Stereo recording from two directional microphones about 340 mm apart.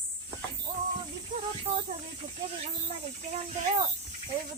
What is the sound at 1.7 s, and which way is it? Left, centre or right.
Speech, centre.